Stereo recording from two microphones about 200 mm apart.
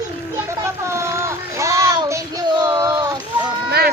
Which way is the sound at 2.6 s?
20° right (ahead or behind).